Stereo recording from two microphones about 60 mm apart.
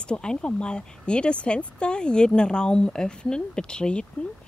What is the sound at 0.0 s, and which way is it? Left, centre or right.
Speech, centre.